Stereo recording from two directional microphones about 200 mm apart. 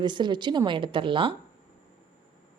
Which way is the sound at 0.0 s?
20° right (ahead or behind).